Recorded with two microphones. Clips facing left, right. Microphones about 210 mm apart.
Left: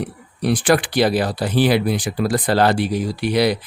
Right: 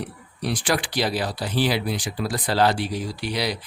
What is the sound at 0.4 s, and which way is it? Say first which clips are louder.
Speech: left 8 dB; 55° left (ahead or behind).